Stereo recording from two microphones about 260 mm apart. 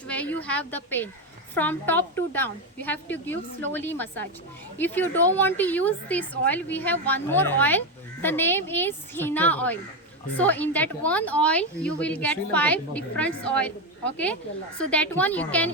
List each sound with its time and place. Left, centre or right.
0.1 s a woman's voice: centre
14.8 s speech: centre